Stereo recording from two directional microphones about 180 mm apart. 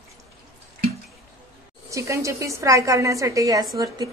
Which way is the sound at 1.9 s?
15° right (ahead or behind).